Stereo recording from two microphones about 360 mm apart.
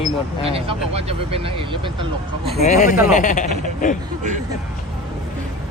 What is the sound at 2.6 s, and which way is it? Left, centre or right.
Speech, centre.